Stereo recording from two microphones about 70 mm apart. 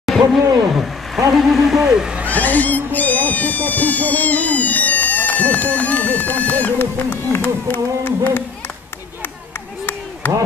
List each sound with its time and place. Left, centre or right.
0.0 s a sound: centre
1.3 s speech: centre
2.2 s speech: left
10.2 s speech: left